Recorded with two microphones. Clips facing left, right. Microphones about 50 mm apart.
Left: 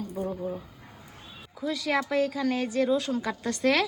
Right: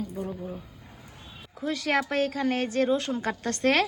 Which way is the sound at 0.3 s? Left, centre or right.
Left.